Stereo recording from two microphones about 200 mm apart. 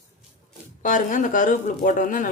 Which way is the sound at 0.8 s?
40° left (ahead or behind).